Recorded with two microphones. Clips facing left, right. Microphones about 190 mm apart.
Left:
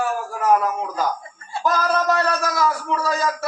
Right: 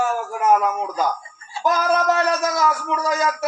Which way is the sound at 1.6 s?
20° right (ahead or behind).